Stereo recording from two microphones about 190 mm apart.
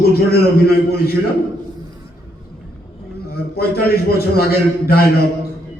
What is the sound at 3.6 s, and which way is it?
A man's voice, 55° left (ahead or behind).